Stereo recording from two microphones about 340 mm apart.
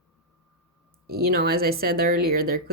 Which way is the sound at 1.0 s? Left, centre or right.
Right.